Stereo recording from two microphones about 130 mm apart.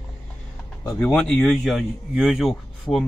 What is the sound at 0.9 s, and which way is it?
A man's voice, 5° left (ahead or behind).